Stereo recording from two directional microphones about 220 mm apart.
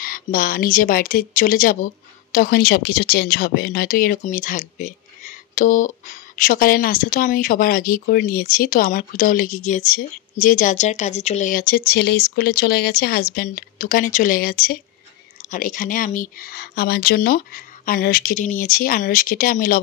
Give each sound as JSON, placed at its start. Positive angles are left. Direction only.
{"t": 0.0, "sound": "a woman's voice", "side_deg": 40}